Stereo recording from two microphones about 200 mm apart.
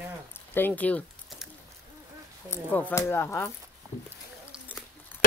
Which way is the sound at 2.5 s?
10° left (ahead or behind).